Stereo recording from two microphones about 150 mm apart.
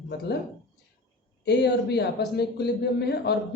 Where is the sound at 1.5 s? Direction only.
90° left.